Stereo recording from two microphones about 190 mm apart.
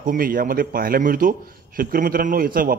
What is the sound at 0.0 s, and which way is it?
A man's voice, 45° right (ahead or behind).